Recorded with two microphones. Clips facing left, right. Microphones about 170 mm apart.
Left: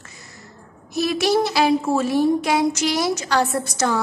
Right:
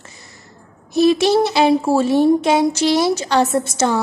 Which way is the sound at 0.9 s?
25° right (ahead or behind).